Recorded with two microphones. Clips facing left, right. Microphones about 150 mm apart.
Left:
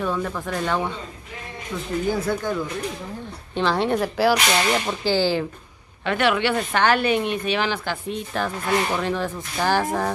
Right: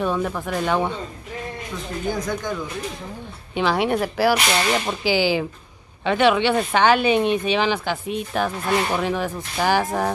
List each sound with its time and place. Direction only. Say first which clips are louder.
0.0 s speech: right 2 dB; 15° right (ahead or behind)
2.1 s speech: left 2 dB; 5° left (ahead or behind)
3.5 s speech: right 1 dB; 10° right (ahead or behind)